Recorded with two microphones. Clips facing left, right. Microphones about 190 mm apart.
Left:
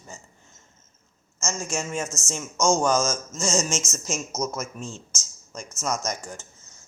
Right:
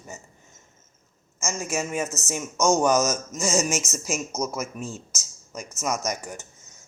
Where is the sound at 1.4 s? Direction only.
10° right (ahead or behind).